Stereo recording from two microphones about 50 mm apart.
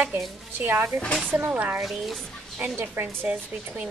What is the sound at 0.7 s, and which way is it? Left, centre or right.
Speech, right.